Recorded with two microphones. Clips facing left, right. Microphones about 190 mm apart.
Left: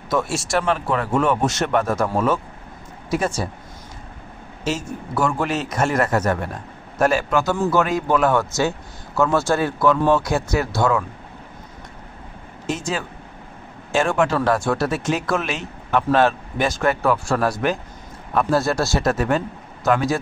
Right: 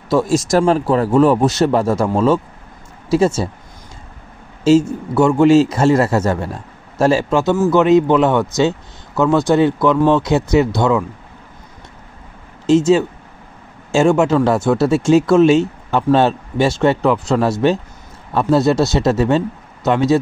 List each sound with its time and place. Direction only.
0.1 s speech: 30° right (ahead or behind)
4.6 s speech: 25° right (ahead or behind)
12.6 s speech: 25° right (ahead or behind)